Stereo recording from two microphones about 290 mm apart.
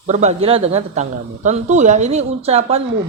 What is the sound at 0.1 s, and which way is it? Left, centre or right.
Speech, right.